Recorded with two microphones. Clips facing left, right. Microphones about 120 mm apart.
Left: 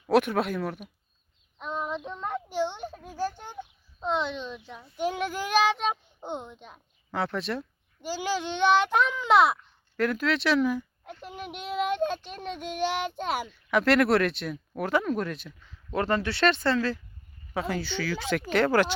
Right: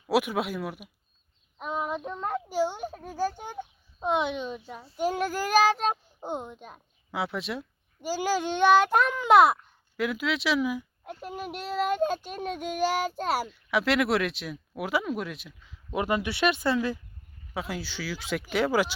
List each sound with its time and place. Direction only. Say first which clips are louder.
0.1 s speech: left 3 dB; 5° right (ahead or behind)
1.5 s child singing: right 1 dB; 5° right (ahead or behind)
2.0 s a child's voice: right 2 dB; 5° right (ahead or behind)
16.7 s a child's voice: even; 15° right (ahead or behind)
17.5 s speech: left 4 dB; 5° right (ahead or behind)